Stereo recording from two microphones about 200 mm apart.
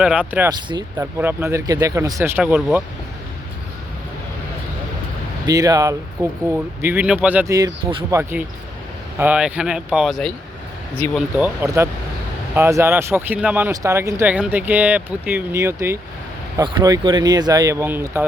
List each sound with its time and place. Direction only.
0.0 s speech: 5° right (ahead or behind)
0.7 s speech: 20° right (ahead or behind); by 2.8 s 5° right (ahead or behind)
5.5 s speech: 15° right (ahead or behind); by 11.2 s 5° left (ahead or behind)
11.3 s speech: 10° right (ahead or behind)